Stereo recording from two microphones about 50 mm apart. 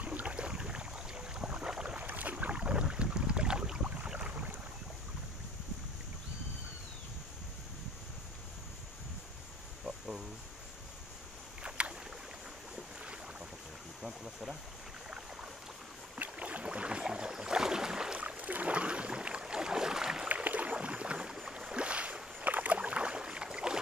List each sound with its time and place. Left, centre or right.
0.0 s boat: right
2.0 s boat: right
9.8 s a sound: centre
11.6 s rowboat: right
14.0 s a sound: centre
15.0 s boat: centre
16.2 s boat: right
18.4 s boat: right; by 20.2 s centre
20.2 s boat: right